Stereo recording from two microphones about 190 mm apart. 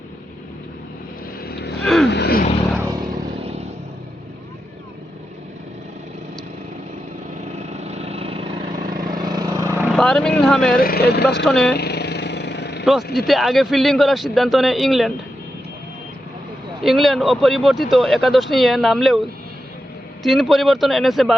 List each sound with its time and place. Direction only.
1.5 s vehicle: 55° left (ahead or behind)
2.7 s vehicle: 15° right (ahead or behind)
7.7 s vehicle: 35° right (ahead or behind)
8.9 s vehicle: 45° right (ahead or behind)
9.2 s vehicle: 20° right (ahead or behind)
9.9 s speech: 5° left (ahead or behind)
10.8 s speech: 55° left (ahead or behind)
11.4 s speech: 5° left (ahead or behind)
11.8 s vehicle: 60° left (ahead or behind)
12.8 s speech: centre (ahead or behind)
16.8 s speech: centre (ahead or behind)
20.2 s speech: centre (ahead or behind)